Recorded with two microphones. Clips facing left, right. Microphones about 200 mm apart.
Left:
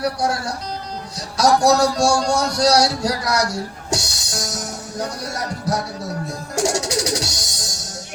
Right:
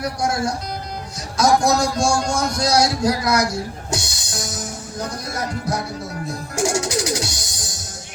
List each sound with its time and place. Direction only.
0.0 s speech: 35° left (ahead or behind)
1.6 s speech: 35° left (ahead or behind)
6.6 s music: 40° left (ahead or behind)